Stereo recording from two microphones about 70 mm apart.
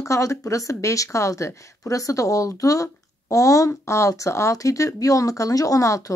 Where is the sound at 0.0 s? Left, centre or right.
Left.